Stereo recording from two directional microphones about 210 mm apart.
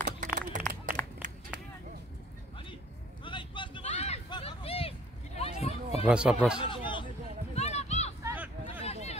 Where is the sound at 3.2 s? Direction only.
25° left (ahead or behind).